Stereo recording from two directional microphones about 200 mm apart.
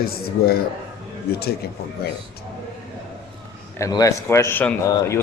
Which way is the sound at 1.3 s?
50° left (ahead or behind).